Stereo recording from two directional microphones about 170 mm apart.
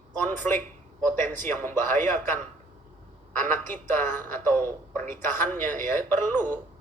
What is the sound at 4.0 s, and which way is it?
A man's voice, 15° left (ahead or behind).